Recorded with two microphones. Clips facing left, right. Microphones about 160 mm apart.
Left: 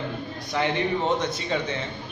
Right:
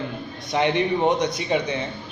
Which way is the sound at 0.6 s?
20° right (ahead or behind).